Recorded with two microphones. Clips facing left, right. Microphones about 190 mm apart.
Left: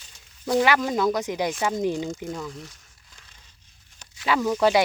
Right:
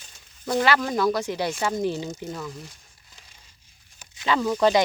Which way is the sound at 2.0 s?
20° right (ahead or behind).